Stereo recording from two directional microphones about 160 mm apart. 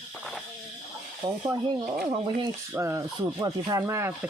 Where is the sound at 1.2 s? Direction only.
25° right (ahead or behind).